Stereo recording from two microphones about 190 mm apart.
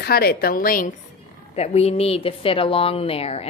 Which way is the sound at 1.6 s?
35° left (ahead or behind).